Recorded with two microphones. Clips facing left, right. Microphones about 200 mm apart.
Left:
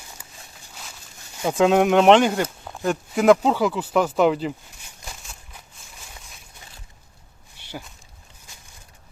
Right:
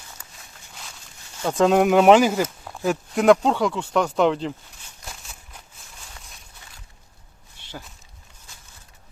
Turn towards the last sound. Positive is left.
turn(degrees=5)  # may be behind; listen again after turning